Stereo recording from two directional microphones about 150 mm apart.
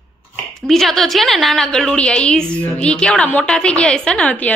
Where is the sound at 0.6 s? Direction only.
Centre (ahead or behind).